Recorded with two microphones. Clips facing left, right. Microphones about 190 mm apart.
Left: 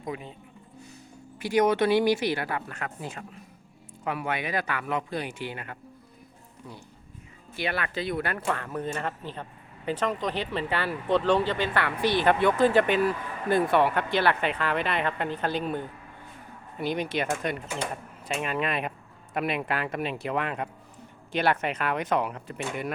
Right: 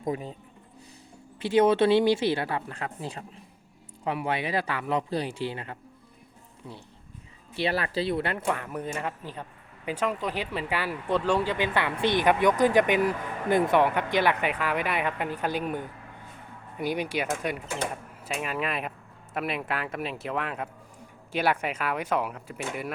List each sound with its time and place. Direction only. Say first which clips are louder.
0.1 s a man's voice: right 4 dB; 35° right (ahead or behind)
1.4 s a woman's voice: right 2 dB; 25° right (ahead or behind)
7.5 s a man's voice: right 3 dB; 35° right (ahead or behind)
8.4 s speech: even; 15° right (ahead or behind)